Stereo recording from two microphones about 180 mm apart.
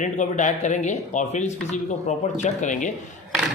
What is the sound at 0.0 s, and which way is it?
A man's voice, 45° left (ahead or behind).